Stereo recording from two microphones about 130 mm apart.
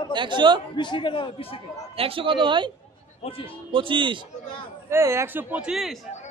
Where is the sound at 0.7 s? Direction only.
40° left (ahead or behind).